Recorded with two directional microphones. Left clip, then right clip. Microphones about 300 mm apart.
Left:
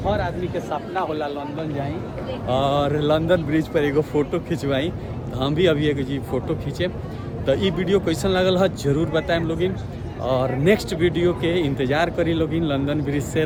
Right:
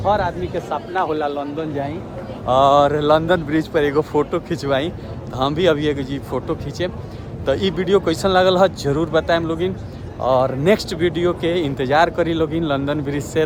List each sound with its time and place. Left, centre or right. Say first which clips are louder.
0.0 s speech: right 5 dB; centre